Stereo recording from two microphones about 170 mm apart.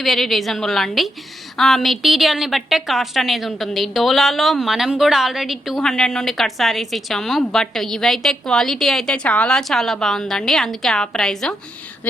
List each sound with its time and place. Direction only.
0.0 s a woman's voice: centre (ahead or behind)